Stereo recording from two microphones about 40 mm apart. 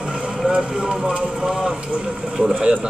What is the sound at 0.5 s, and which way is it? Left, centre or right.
Speech, right.